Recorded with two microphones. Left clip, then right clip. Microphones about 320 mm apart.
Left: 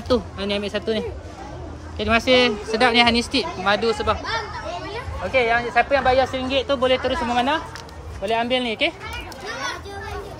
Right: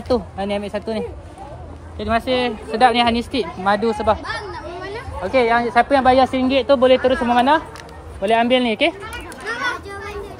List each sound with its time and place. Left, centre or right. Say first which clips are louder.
0.1 s speech: right 2 dB; centre
4.3 s a sound: left 1 dB; right
5.9 s speech: right 4 dB; right